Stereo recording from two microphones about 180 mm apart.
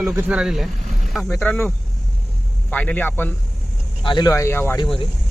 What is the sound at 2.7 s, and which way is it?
Speech, 10° left (ahead or behind).